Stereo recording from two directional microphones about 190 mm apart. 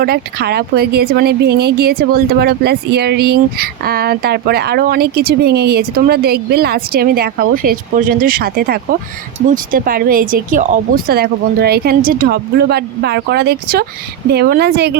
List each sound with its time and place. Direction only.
0.0 s a woman's voice: 55° right (ahead or behind)